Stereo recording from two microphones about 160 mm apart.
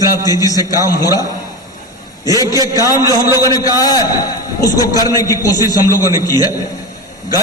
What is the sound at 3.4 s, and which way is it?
A man's voice, 20° left (ahead or behind).